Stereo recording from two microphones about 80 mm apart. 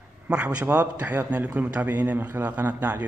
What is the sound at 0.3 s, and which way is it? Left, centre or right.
A man's voice, centre.